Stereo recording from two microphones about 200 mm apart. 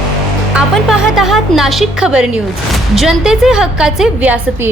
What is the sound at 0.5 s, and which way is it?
A woman's voice, centre (ahead or behind).